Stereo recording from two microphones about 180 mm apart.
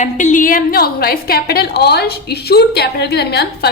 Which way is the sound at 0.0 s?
40° left (ahead or behind).